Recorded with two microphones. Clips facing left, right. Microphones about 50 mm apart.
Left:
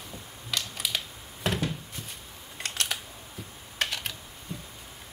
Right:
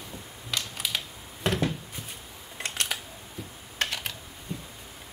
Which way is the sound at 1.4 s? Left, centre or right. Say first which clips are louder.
Right 2 dB; centre.